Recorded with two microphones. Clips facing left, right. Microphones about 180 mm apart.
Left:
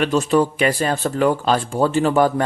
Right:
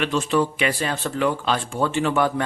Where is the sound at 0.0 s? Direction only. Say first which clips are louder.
Left 4 dB; 40° left (ahead or behind).